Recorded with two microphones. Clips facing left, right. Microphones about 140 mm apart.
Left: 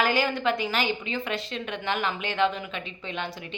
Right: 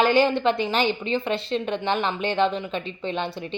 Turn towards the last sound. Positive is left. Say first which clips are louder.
# right 6 dB
turn(degrees=-30)  # may be behind; listen again after turning